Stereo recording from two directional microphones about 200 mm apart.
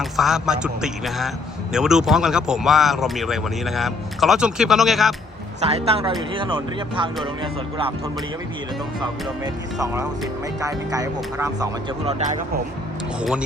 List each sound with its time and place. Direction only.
0.0 s speech: centre (ahead or behind)
5.6 s a man's voice: 30° right (ahead or behind)
9.4 s speech: 15° right (ahead or behind)
13.1 s speech: 5° right (ahead or behind)